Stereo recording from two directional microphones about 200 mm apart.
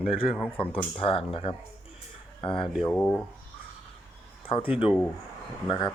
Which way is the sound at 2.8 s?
5° left (ahead or behind).